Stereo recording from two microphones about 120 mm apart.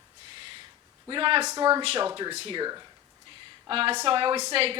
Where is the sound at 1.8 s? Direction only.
50° right (ahead or behind).